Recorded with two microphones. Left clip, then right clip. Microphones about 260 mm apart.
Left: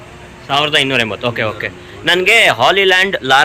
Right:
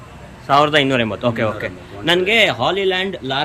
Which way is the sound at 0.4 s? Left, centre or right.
Centre.